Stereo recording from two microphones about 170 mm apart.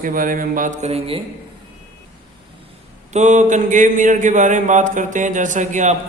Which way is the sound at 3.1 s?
45° right (ahead or behind).